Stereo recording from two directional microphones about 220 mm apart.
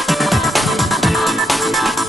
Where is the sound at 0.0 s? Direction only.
Centre (ahead or behind).